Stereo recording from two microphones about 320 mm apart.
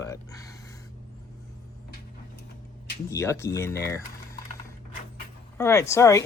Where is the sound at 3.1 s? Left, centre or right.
Centre.